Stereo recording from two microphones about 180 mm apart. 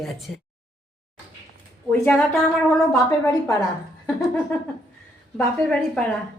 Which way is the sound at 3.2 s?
15° left (ahead or behind).